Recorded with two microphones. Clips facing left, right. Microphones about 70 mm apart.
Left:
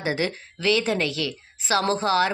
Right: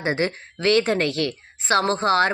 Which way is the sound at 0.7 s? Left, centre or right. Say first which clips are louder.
Right 3 dB; right.